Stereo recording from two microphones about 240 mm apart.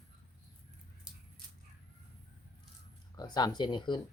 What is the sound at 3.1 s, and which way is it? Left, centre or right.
Speech, centre.